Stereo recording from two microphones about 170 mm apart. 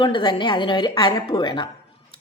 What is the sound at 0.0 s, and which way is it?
A woman's voice, 30° left (ahead or behind).